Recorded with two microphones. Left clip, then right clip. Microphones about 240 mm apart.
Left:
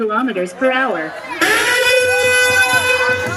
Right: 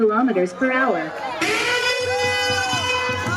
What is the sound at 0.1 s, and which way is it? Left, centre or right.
Speech, centre.